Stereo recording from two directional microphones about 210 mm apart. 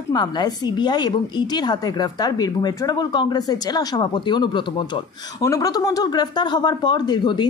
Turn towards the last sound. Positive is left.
turn(degrees=20)  # may be behind; listen again after turning